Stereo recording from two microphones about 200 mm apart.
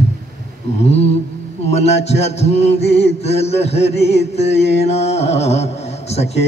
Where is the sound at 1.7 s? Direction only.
30° left (ahead or behind).